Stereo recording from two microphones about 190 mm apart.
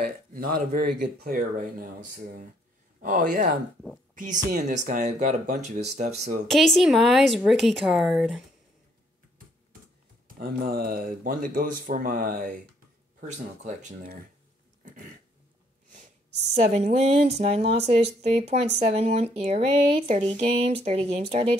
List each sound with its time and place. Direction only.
0.0 s speech: 45° right (ahead or behind)
4.1 s a sound: 40° right (ahead or behind)
4.5 s speech: 40° right (ahead or behind)
6.4 s a woman's voice: centre (ahead or behind)
10.2 s speech: 50° right (ahead or behind)
16.5 s speech: 35° right (ahead or behind)